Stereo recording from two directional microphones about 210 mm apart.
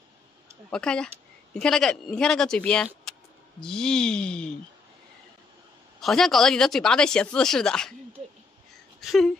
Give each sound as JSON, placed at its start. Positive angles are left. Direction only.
{"t": 0.7, "sound": "speech", "side_deg": 5}
{"t": 5.9, "sound": "speech", "side_deg": 0}